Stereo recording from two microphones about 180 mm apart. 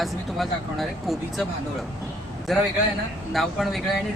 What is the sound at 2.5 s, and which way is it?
Speech, centre (ahead or behind).